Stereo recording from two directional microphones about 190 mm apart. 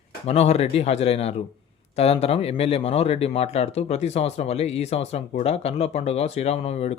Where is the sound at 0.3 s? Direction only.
35° left (ahead or behind).